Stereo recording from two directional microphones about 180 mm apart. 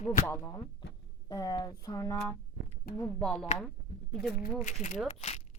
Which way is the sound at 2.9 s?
10° left (ahead or behind).